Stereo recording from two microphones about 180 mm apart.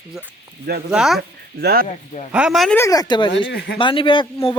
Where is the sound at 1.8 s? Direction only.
40° left (ahead or behind).